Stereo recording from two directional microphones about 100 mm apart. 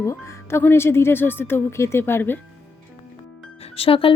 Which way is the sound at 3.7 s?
70° left (ahead or behind).